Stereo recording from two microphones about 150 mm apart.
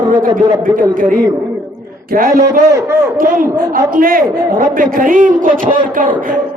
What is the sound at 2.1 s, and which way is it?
A man's voice, 70° right (ahead or behind).